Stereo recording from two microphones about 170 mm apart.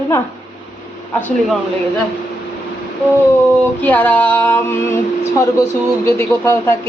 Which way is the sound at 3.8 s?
10° left (ahead or behind).